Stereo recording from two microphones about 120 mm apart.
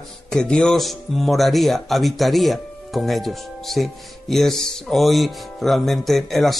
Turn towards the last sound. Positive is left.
turn(degrees=0)  # may be behind; listen again after turning